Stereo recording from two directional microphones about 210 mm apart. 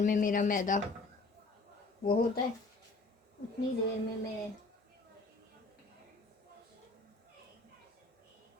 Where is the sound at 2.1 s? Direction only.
45° left (ahead or behind).